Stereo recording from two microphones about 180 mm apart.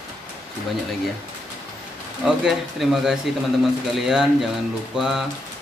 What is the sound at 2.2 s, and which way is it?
Speech, centre (ahead or behind).